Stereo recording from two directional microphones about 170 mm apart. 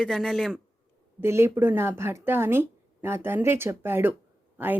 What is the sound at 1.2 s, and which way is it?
Speech, 15° right (ahead or behind).